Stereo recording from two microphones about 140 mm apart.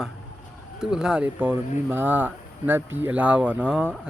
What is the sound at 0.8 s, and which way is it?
Speech, 5° right (ahead or behind).